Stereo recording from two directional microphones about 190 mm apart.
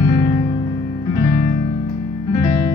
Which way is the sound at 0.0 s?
20° left (ahead or behind).